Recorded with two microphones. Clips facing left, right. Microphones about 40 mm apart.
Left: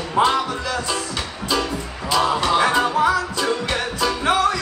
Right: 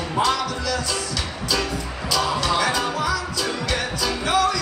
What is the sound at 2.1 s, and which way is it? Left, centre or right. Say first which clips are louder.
Music: left 4 dB; left.